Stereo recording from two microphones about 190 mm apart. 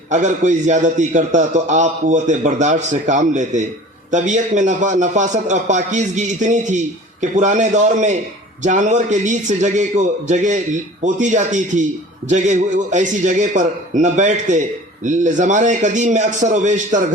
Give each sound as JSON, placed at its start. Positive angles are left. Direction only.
{"t": 0.1, "sound": "a man's voice", "side_deg": -40}